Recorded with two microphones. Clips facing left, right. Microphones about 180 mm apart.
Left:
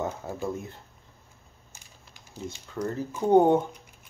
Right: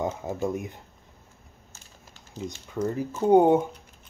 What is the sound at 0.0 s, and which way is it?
Speech, 15° right (ahead or behind).